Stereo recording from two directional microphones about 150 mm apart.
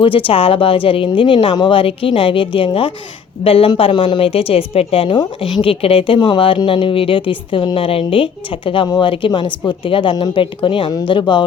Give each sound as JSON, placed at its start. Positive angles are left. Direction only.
{"t": 0.0, "sound": "a woman's voice", "side_deg": 35}